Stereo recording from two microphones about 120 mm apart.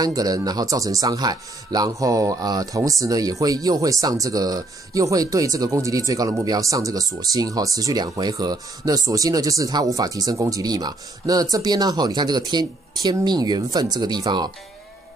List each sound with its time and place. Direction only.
0.0 s speech: 30° right (ahead or behind)